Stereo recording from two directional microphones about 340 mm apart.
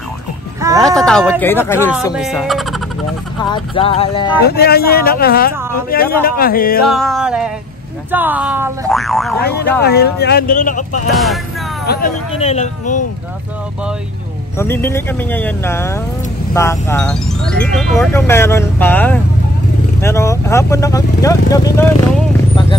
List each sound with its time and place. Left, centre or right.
0.6 s speech: centre
0.8 s speech: centre
3.4 s speech: centre
4.5 s speech: left
6.9 s speech: centre
9.4 s speech: left
11.1 s speech: centre
11.8 s speech: left
14.6 s speech: centre